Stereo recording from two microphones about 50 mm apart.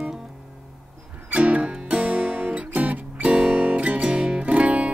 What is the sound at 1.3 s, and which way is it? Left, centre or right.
Music, right.